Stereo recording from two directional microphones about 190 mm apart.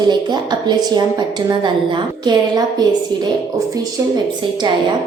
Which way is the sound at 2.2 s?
20° right (ahead or behind).